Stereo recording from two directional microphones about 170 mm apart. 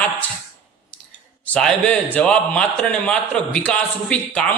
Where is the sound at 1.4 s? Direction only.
5° left (ahead or behind).